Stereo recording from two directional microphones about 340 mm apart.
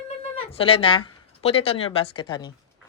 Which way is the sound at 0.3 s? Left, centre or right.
Centre.